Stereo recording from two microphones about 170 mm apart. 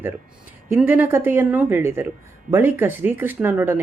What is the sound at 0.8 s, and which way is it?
Speech, 10° right (ahead or behind).